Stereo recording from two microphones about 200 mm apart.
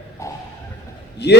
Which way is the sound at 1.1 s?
55° left (ahead or behind).